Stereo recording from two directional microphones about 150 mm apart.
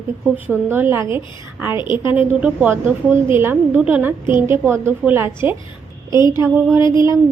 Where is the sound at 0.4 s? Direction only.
15° right (ahead or behind).